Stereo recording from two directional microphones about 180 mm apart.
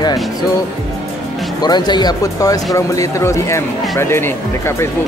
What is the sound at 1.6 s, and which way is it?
Speech, 25° left (ahead or behind).